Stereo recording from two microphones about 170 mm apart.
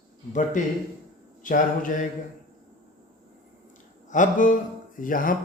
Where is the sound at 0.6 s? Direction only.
50° left (ahead or behind).